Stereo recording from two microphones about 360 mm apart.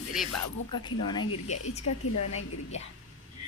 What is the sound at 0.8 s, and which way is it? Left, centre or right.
A woman's voice, left.